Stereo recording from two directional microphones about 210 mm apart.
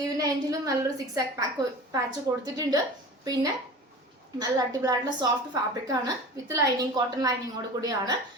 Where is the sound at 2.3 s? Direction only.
15° right (ahead or behind).